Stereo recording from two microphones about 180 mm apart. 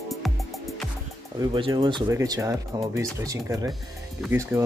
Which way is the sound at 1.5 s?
25° right (ahead or behind).